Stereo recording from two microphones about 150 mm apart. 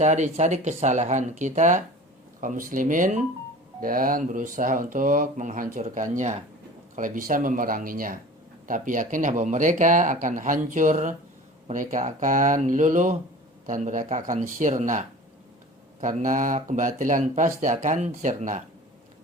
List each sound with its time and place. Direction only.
0.0 s speech: 50° right (ahead or behind)
3.8 s speech: 70° right (ahead or behind)